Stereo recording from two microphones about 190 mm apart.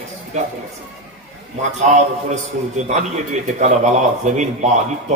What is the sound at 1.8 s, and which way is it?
A man's voice, 40° right (ahead or behind).